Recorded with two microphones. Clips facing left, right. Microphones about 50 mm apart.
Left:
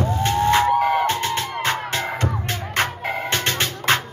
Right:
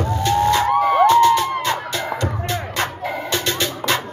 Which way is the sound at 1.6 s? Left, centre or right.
Left.